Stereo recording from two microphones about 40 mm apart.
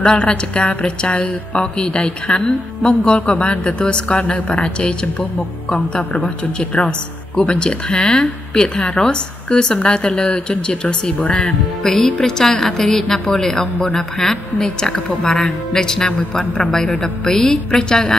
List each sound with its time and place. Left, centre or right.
0.0 s a woman's voice: left
5.9 s a woman's voice: left
7.3 s a woman's voice: left
11.8 s a woman's voice: centre